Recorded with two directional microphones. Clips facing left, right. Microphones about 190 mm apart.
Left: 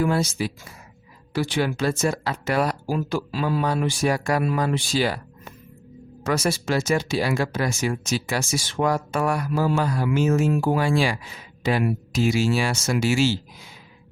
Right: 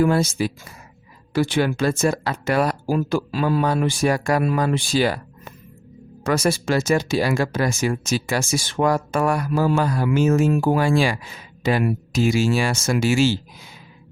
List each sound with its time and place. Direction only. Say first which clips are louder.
0.0 s speech: right 4 dB; 50° right (ahead or behind)